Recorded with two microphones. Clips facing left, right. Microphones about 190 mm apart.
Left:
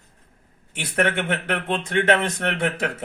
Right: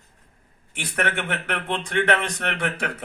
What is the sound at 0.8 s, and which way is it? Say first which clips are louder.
Speech: left 4 dB; 25° left (ahead or behind).